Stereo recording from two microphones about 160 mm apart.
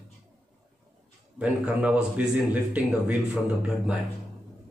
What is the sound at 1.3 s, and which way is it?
A man's voice, 5° right (ahead or behind).